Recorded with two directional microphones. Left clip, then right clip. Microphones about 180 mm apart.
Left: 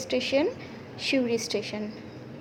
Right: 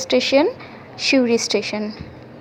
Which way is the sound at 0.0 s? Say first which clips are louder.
Right 10 dB; 25° right (ahead or behind).